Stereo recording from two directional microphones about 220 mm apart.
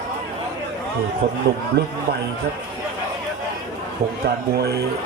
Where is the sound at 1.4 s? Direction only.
50° right (ahead or behind).